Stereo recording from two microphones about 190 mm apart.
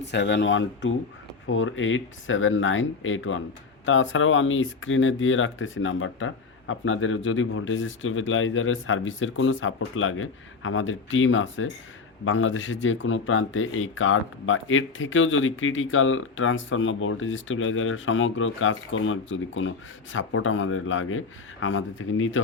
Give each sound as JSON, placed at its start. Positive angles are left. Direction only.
{"t": 0.1, "sound": "speech", "side_deg": 65}